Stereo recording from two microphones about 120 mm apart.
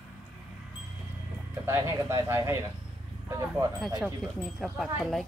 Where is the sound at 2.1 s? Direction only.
25° right (ahead or behind).